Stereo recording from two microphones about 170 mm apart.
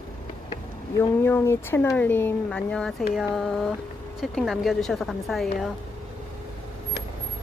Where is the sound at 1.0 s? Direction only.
15° left (ahead or behind).